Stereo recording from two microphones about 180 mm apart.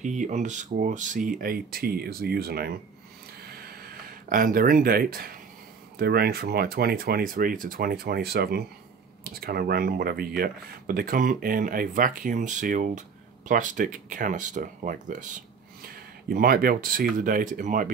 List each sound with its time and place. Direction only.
0.0 s speech: 40° right (ahead or behind); by 2.7 s 60° right (ahead or behind)
3.3 s a sound: 60° right (ahead or behind)
5.9 s speech: 60° right (ahead or behind); by 17.8 s 45° right (ahead or behind)